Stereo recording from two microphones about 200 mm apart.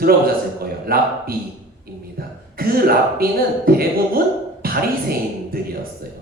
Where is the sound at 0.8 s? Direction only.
50° right (ahead or behind).